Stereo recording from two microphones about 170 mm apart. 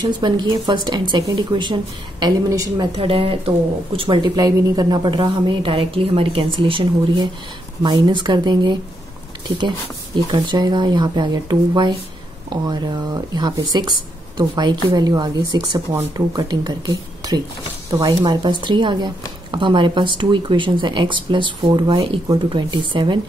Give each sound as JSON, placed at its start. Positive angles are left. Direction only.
{"t": 0.0, "sound": "speech", "side_deg": -25}
{"t": 3.0, "sound": "speech", "side_deg": -35}
{"t": 10.3, "sound": "speech", "side_deg": -25}